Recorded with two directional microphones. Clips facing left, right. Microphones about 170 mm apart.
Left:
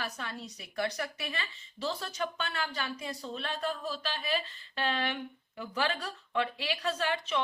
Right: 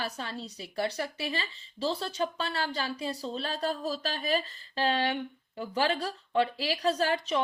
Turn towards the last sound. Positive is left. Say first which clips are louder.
# right 4 dB
turn(degrees=-35)  # may be behind; listen again after turning